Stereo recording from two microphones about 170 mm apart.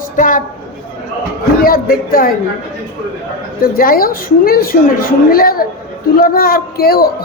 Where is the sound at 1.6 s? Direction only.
60° left (ahead or behind).